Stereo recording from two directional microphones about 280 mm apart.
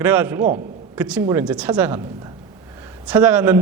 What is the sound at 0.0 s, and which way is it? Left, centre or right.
A man's voice, centre.